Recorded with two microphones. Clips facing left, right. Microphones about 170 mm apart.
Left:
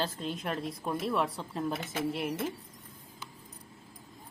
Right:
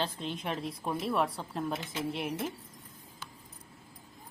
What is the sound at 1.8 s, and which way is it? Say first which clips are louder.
Speech: left 2 dB; 50° left (ahead or behind).